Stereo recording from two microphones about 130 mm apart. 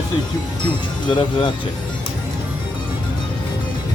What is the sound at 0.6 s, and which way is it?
Speech, 35° left (ahead or behind).